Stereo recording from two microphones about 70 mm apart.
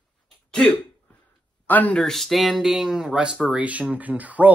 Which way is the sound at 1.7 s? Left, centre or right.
Left.